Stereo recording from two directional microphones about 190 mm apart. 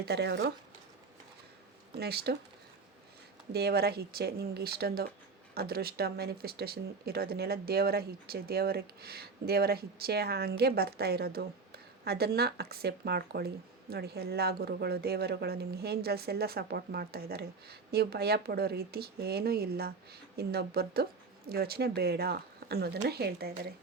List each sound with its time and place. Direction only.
0.0 s speech: 60° right (ahead or behind)
2.0 s speech: 55° right (ahead or behind)
3.5 s speech: 55° right (ahead or behind)